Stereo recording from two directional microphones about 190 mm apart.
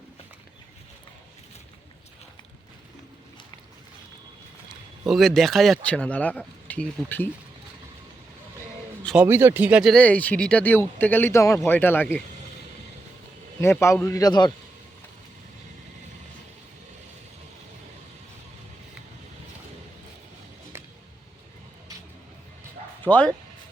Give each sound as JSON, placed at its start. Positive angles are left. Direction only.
{"t": 5.0, "sound": "speech", "side_deg": 0}
{"t": 9.2, "sound": "speech", "side_deg": -10}
{"t": 10.0, "sound": "a man's voice", "side_deg": 10}
{"t": 13.6, "sound": "a man's voice", "side_deg": 15}
{"t": 23.0, "sound": "a man's voice", "side_deg": 10}